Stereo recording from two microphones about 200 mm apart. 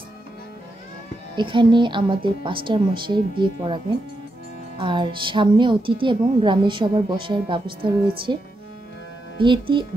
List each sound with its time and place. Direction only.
1.3 s a woman's voice: 25° right (ahead or behind)